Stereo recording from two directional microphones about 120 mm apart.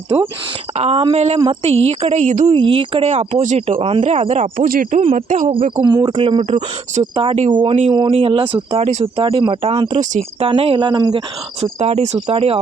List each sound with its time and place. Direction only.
0.1 s speech: 50° right (ahead or behind); by 2.6 s 85° right
2.6 s speech: 50° right (ahead or behind); by 3.8 s 75° right (ahead or behind)
3.8 s speech: 50° right (ahead or behind)
4.0 s speech: 70° right (ahead or behind); by 5.5 s 90° right
5.8 s speech: 35° right (ahead or behind); by 7.1 s 65° right (ahead or behind)
7.5 s speech: 45° right (ahead or behind)
10.0 s speech: 90° right
10.4 s speech: 50° right (ahead or behind)
11.6 s speech: 60° right (ahead or behind)